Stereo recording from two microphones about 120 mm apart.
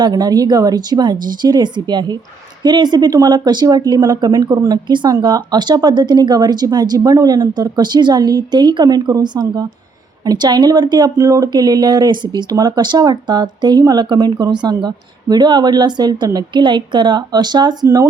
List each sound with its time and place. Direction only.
0.0 s speech: 35° right (ahead or behind)
17.8 s speech: 25° right (ahead or behind)